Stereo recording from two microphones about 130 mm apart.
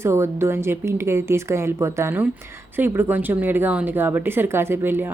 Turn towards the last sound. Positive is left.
turn(degrees=-15)  # may be behind; listen again after turning